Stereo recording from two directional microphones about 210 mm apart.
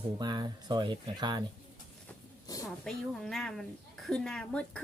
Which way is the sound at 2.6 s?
Centre (ahead or behind).